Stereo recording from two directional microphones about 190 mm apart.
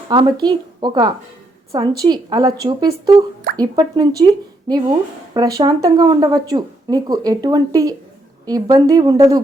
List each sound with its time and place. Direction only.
0.1 s speech: 20° right (ahead or behind)